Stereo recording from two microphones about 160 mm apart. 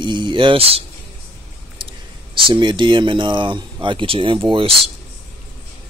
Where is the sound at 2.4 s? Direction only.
30° right (ahead or behind).